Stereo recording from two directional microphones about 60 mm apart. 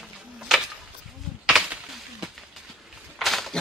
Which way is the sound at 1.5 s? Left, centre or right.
Centre.